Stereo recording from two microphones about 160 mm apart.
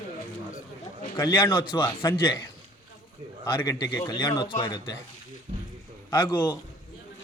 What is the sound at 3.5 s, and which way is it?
Speech, 25° left (ahead or behind).